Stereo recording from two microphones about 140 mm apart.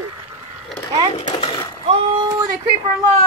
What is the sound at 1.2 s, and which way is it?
Speech, 35° left (ahead or behind).